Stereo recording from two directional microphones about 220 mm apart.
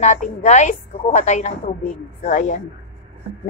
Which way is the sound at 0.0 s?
35° left (ahead or behind).